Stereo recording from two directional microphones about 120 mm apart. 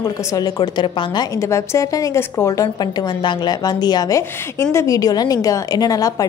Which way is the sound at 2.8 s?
40° left (ahead or behind).